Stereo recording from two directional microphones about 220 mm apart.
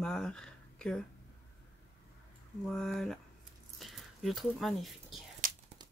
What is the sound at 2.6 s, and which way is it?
Speech, 5° left (ahead or behind).